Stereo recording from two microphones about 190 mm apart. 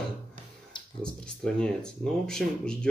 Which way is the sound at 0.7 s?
25° left (ahead or behind).